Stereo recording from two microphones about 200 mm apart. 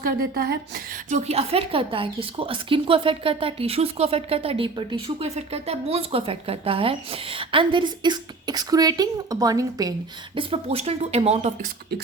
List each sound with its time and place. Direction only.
0.0 s speech: 50° right (ahead or behind)
1.1 s speech: 30° right (ahead or behind)
10.3 s speech: 30° right (ahead or behind)